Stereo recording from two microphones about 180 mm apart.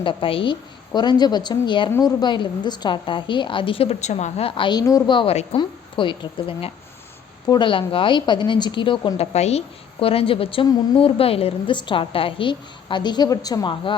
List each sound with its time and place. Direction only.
0.0 s a woman's voice: 30° left (ahead or behind)